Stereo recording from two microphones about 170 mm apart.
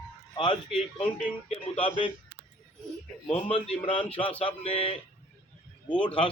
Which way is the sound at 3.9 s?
35° left (ahead or behind).